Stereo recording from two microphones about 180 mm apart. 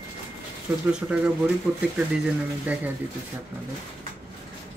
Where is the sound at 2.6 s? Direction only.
10° right (ahead or behind).